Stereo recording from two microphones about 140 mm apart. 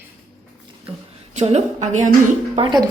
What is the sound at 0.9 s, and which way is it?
A woman's voice, 50° right (ahead or behind).